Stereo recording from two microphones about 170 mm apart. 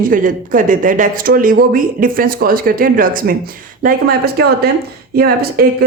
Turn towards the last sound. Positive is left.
turn(degrees=-60)  # may be behind; listen again after turning